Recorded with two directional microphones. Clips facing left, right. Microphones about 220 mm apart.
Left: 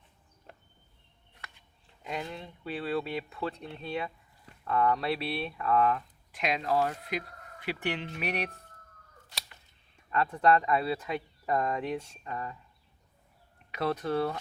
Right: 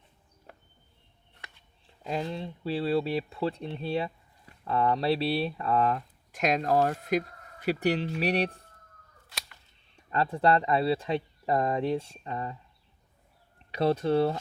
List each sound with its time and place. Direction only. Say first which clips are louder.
2.0 s speech: right 5 dB; 30° right (ahead or behind)
9.9 s speech: right 2 dB; 30° right (ahead or behind)
13.7 s speech: right 5 dB; 30° right (ahead or behind)